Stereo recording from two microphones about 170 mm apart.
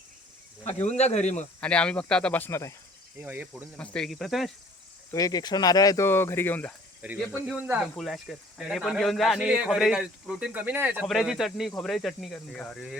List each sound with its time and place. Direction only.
0.8 s speech: 40° left (ahead or behind)
1.6 s speech: 5° left (ahead or behind)
3.2 s speech: 10° right (ahead or behind)
3.8 s speech: 5° left (ahead or behind)
5.1 s speech: 20° left (ahead or behind)
7.0 s speech: 10° right (ahead or behind)